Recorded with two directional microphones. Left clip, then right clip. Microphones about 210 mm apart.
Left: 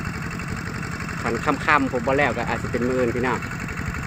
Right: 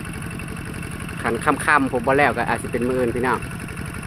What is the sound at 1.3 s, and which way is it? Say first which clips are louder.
Speech: right 2 dB; 10° right (ahead or behind).